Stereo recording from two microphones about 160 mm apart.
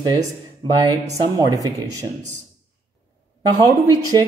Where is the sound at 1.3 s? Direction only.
25° right (ahead or behind).